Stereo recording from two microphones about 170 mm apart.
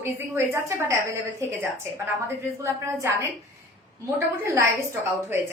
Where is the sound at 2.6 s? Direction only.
15° right (ahead or behind).